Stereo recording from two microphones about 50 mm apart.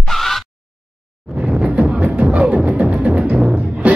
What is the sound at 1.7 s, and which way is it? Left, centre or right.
Music, right.